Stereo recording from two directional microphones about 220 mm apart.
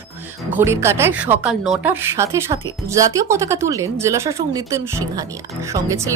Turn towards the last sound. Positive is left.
turn(degrees=-15)  # may be behind; listen again after turning